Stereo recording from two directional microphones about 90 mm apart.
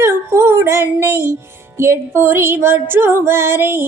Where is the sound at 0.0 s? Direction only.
30° right (ahead or behind).